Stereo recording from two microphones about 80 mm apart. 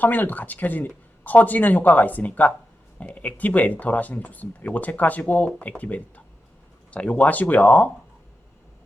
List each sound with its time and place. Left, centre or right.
0.0 s speech: left